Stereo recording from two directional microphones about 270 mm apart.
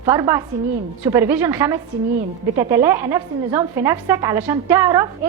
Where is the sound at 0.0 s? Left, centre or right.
Centre.